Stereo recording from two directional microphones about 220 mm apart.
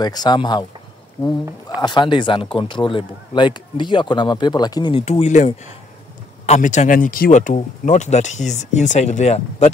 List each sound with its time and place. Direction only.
0.0 s speech: 20° left (ahead or behind)
1.8 s speech: 20° left (ahead or behind)